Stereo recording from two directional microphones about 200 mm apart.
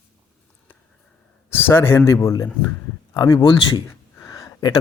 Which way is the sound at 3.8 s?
15° left (ahead or behind).